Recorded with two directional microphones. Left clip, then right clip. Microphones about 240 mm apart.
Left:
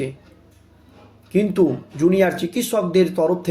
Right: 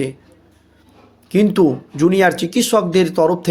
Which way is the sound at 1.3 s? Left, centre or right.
Right.